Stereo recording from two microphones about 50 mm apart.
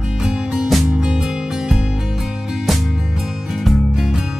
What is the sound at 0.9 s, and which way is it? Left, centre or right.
Music, centre.